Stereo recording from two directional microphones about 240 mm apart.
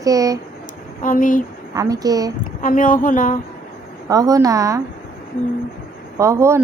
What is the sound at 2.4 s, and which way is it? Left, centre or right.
Speech, left.